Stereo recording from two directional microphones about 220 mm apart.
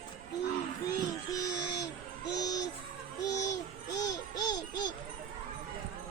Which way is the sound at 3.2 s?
15° left (ahead or behind).